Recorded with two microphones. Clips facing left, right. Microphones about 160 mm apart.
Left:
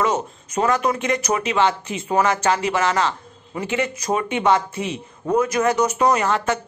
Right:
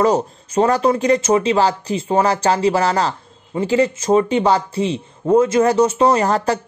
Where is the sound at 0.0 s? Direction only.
35° right (ahead or behind).